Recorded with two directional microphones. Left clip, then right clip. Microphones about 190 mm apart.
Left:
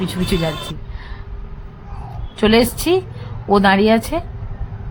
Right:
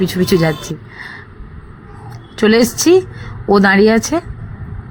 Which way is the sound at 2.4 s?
15° right (ahead or behind).